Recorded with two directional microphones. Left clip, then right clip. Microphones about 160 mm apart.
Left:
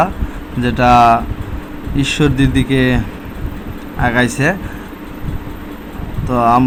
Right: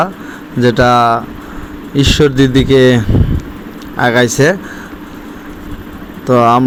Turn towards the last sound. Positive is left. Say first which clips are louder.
# right 3 dB
turn(degrees=-30)  # may be behind; listen again after turning